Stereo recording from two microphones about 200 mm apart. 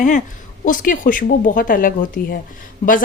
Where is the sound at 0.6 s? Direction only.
45° left (ahead or behind).